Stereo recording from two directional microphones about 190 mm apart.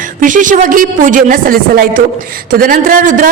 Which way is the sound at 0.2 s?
45° right (ahead or behind).